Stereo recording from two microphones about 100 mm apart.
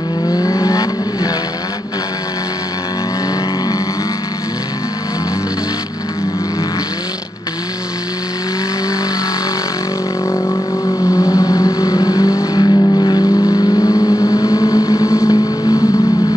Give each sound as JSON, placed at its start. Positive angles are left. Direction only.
{"t": 0.3, "sound": "vehicle", "side_deg": 40}
{"t": 10.3, "sound": "vehicle", "side_deg": 25}